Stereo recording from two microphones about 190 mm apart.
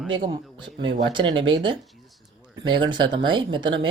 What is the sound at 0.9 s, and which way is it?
Speech, 75° right (ahead or behind).